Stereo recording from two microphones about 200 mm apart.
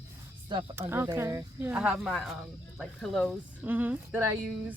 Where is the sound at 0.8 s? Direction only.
10° right (ahead or behind).